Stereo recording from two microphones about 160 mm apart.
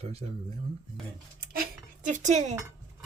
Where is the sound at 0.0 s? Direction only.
40° right (ahead or behind).